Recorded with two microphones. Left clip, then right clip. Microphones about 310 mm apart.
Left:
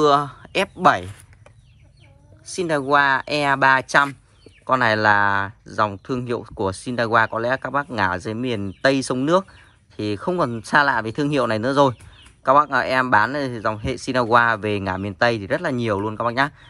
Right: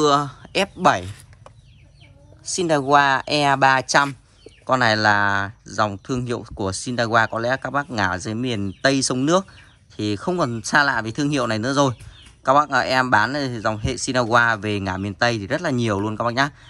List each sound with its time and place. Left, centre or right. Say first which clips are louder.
0.0 s speech: left 1 dB; centre
2.5 s speech: right 2 dB; centre